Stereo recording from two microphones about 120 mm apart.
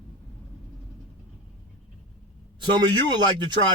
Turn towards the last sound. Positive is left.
turn(degrees=-40)  # may be behind; listen again after turning